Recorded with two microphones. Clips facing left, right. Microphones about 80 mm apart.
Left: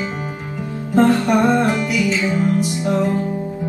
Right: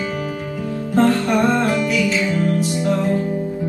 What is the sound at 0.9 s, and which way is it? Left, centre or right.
Music, centre.